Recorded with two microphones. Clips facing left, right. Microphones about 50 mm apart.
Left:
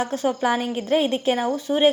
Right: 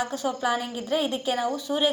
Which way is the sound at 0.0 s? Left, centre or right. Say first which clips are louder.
Left 4 dB; left.